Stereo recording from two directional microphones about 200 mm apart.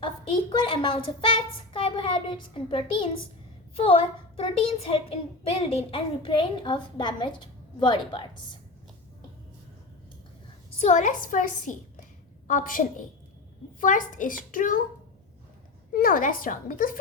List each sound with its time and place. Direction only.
0.5 s a child's voice: 25° left (ahead or behind)
10.8 s a woman's voice: 35° left (ahead or behind)
15.9 s a woman's voice: 45° left (ahead or behind)